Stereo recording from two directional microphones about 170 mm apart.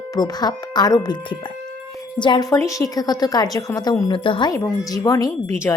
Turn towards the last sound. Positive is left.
turn(degrees=10)  # may be behind; listen again after turning